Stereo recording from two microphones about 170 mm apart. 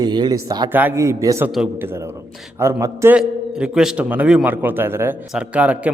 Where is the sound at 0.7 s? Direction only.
10° right (ahead or behind).